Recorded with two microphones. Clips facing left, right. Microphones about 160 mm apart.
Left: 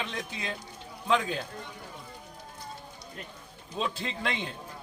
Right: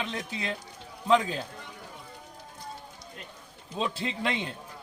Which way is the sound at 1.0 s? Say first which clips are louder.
Right 3 dB; 35° right (ahead or behind).